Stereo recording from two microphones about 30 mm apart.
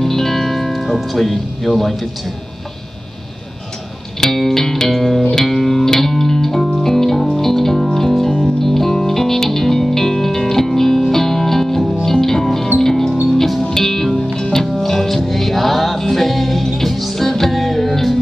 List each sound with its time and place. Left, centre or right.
0.0 s music: centre
4.2 s music: centre